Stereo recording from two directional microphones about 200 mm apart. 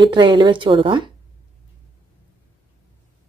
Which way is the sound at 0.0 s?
25° right (ahead or behind).